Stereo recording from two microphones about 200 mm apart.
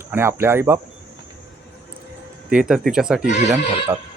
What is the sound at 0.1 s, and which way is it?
Speech, 10° right (ahead or behind).